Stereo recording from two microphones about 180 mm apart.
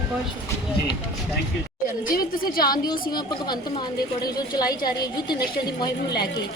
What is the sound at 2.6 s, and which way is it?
A woman's voice, 20° left (ahead or behind).